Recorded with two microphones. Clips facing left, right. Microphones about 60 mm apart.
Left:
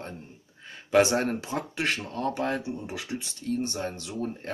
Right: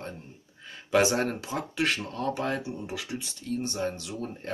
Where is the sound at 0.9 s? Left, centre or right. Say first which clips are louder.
Left 2 dB; left.